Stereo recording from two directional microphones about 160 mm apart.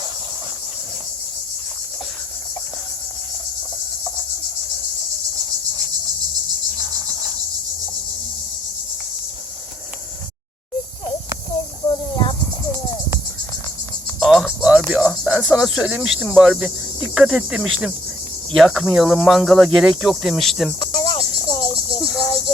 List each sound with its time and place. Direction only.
14.2 s cricket: centre (ahead or behind)
14.8 s speech: 5° right (ahead or behind)
17.2 s cricket: 5° right (ahead or behind)
20.7 s cricket: 30° left (ahead or behind)
21.9 s cricket: centre (ahead or behind)